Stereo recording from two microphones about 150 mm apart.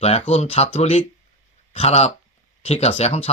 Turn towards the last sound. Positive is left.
turn(degrees=45)  # may be behind; listen again after turning